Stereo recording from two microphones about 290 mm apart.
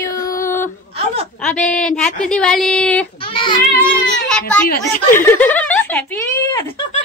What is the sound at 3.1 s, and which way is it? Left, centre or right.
Child singing, centre.